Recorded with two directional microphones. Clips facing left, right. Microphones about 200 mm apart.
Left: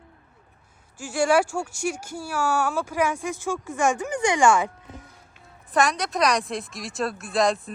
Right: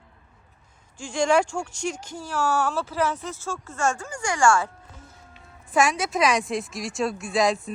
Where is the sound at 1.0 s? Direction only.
5° left (ahead or behind).